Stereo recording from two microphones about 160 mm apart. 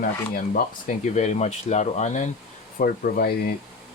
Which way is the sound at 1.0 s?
45° left (ahead or behind).